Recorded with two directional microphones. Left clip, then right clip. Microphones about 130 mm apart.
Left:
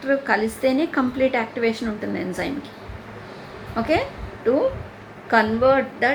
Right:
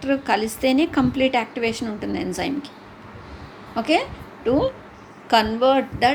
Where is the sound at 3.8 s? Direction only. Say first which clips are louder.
Right 1 dB; 60° right (ahead or behind).